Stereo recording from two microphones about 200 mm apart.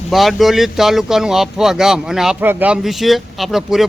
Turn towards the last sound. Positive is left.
turn(degrees=0)  # may be behind; listen again after turning